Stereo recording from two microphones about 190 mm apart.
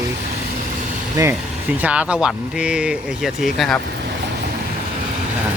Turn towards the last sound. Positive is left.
turn(degrees=0)  # may be behind; listen again after turning